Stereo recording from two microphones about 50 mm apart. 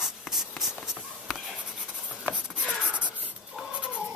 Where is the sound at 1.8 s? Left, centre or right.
Centre.